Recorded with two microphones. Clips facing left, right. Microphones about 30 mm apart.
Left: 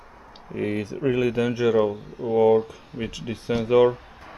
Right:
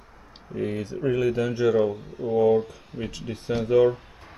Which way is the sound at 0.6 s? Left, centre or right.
Left.